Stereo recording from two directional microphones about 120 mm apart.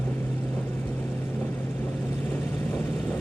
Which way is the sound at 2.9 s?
Centre (ahead or behind).